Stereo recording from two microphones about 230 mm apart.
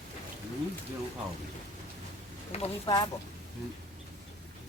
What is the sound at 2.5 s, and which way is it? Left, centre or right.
Speech, left.